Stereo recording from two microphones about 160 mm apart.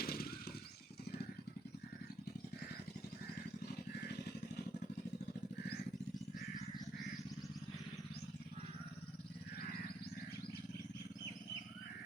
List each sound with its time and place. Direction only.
0.0 s motorcycle: 70° left (ahead or behind)